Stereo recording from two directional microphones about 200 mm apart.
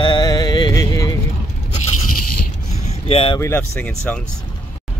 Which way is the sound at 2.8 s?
30° left (ahead or behind).